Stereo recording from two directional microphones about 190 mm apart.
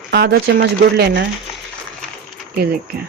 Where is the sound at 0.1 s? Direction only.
55° right (ahead or behind).